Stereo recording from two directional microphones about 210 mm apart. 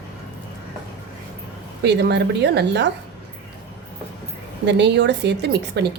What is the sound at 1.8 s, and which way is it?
A woman's voice, 55° right (ahead or behind).